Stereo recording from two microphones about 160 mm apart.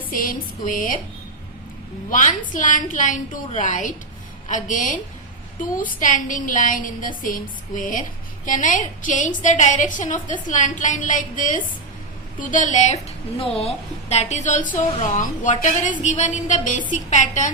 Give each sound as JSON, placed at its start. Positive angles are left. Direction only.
{"t": 0.1, "sound": "a woman's voice", "side_deg": 60}
{"t": 2.0, "sound": "a woman's voice", "side_deg": 55}
{"t": 13.4, "sound": "a woman's voice", "side_deg": 35}